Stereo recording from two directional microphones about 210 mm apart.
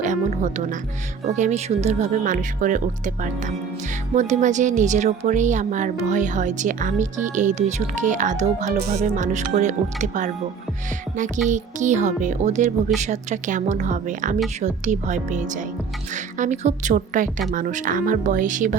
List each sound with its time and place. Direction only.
0.0 s speech: 35° right (ahead or behind)
4.1 s speech: 35° right (ahead or behind)
11.4 s speech: 35° right (ahead or behind)